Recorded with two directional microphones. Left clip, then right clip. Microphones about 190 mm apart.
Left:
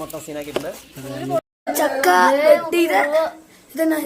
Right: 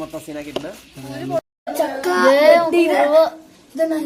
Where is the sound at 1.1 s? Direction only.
Centre (ahead or behind).